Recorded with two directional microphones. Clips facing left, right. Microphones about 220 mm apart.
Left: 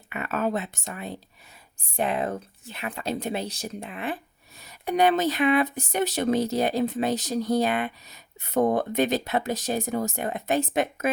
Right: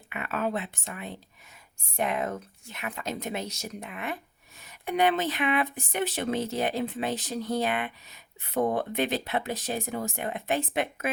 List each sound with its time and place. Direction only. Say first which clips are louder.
0.1 s speech: left 3 dB; 40° left (ahead or behind)